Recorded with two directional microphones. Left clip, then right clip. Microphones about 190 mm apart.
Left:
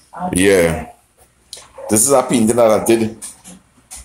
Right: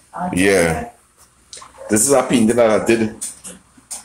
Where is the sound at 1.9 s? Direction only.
15° left (ahead or behind).